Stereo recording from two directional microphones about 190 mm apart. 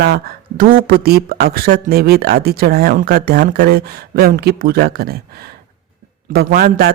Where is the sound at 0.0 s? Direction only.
55° right (ahead or behind).